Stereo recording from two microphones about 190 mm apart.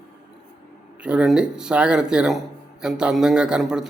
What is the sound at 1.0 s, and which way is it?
A man's voice, 5° right (ahead or behind).